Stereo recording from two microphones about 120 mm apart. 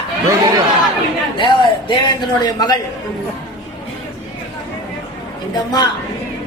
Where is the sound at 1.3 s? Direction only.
40° left (ahead or behind).